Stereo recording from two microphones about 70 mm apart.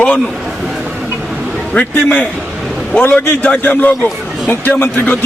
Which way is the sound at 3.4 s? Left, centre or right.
Centre.